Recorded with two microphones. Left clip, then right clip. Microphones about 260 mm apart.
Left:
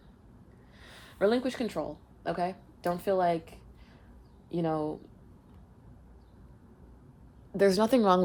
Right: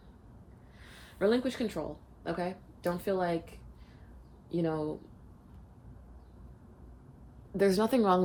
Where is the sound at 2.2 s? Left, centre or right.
Left.